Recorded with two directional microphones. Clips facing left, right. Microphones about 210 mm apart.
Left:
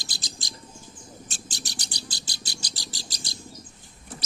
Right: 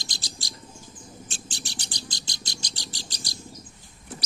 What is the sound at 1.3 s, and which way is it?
Owl, 40° left (ahead or behind).